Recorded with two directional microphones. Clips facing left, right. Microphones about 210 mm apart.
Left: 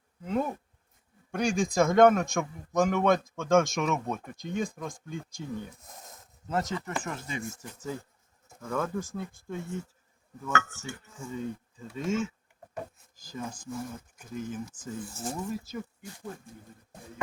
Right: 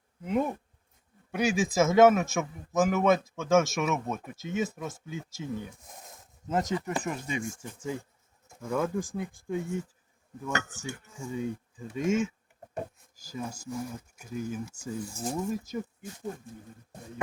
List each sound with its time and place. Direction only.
0.3 s a man's voice: 10° right (ahead or behind)
6.5 s speech: 15° right (ahead or behind)